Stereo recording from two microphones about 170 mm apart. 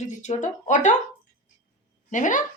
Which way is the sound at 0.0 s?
45° left (ahead or behind).